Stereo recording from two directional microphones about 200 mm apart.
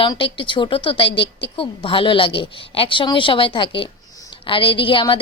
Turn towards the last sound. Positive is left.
turn(degrees=25)  # may be behind; listen again after turning